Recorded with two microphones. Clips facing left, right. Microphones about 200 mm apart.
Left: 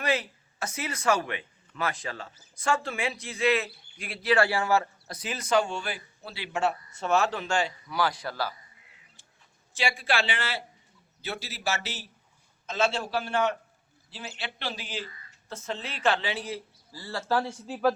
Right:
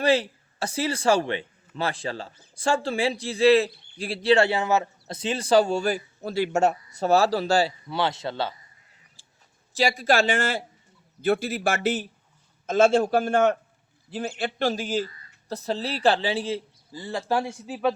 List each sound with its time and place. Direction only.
0.0 s speech: 30° right (ahead or behind)
9.2 s a sound: 30° right (ahead or behind)
9.7 s a man's voice: 40° right (ahead or behind); by 17.9 s 5° right (ahead or behind)